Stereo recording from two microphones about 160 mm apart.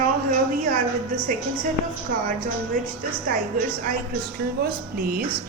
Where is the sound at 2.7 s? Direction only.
60° right (ahead or behind).